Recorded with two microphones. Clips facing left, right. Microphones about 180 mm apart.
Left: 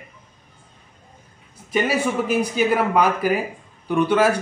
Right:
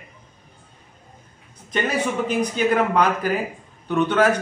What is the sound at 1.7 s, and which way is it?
Speech, 10° left (ahead or behind).